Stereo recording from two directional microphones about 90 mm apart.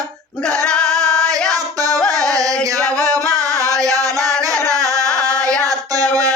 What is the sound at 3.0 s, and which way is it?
Singing, 40° right (ahead or behind).